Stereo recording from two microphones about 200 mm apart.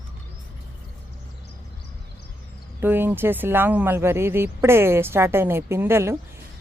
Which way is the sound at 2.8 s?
10° right (ahead or behind).